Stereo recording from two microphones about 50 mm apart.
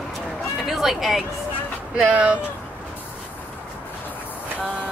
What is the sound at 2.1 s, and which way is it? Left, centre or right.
Speech, right.